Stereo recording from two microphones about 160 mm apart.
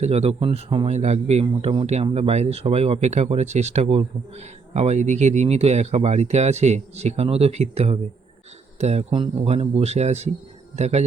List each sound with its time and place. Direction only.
0.0 s speech: 40° right (ahead or behind)